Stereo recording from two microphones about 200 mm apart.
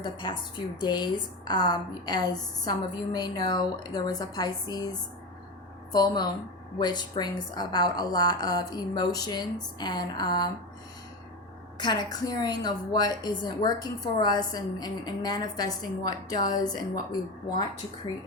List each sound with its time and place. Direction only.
0.0 s a woman's voice: 25° left (ahead or behind)
11.8 s a woman's voice: 20° left (ahead or behind)